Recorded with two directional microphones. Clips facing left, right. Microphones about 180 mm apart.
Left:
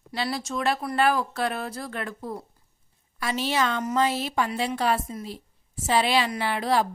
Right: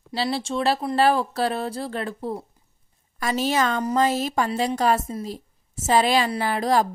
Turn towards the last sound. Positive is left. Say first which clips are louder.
# right 3 dB
turn(degrees=-40)  # may be behind; listen again after turning